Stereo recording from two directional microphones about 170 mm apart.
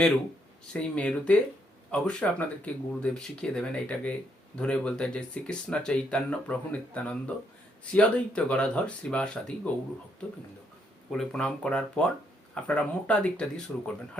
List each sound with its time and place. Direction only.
0.7 s speech: 5° left (ahead or behind)
11.1 s speech: 5° left (ahead or behind)